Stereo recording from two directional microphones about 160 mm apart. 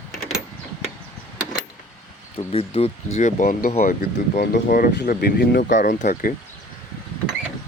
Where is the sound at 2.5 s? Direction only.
40° left (ahead or behind); by 5.8 s 90° left.